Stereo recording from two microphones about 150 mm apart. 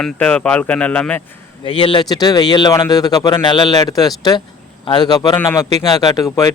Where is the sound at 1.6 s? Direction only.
35° left (ahead or behind).